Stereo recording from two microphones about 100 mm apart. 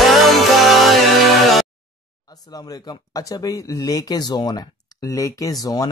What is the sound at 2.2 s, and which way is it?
Speech, 40° left (ahead or behind).